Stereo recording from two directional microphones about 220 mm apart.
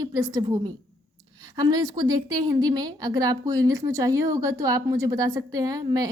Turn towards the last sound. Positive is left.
turn(degrees=-15)  # may be behind; listen again after turning